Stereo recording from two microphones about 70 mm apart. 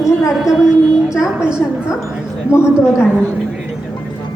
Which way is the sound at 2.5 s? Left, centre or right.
Left.